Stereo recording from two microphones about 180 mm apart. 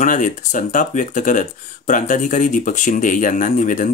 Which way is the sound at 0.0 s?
45° left (ahead or behind).